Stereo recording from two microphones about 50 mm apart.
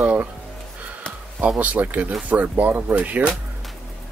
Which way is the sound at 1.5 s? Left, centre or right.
Right.